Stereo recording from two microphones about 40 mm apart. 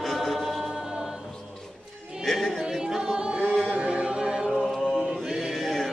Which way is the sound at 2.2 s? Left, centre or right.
Centre.